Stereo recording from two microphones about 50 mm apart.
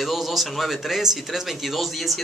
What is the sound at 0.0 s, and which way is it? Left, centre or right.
Speech, centre.